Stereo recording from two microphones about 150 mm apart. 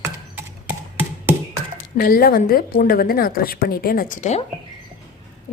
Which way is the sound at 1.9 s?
80° left.